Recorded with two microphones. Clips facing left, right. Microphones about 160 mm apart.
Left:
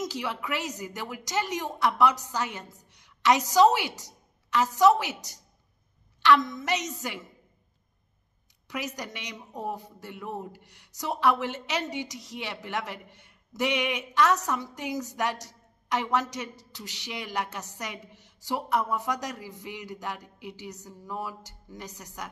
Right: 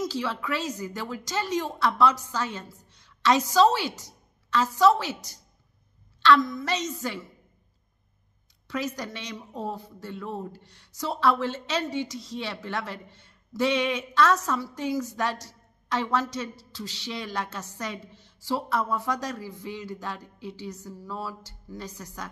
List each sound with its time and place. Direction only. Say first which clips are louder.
0.0 s speech: right 3 dB; 15° left (ahead or behind)
8.6 s speech: right 4 dB; 15° left (ahead or behind)